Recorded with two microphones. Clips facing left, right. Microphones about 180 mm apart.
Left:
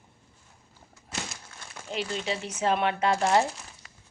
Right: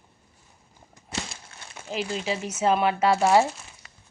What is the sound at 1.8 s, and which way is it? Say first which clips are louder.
Speech: right 2 dB; 5° right (ahead or behind).